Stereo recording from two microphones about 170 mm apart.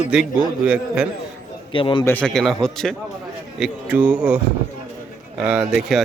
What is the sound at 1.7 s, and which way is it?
Speech, 30° left (ahead or behind).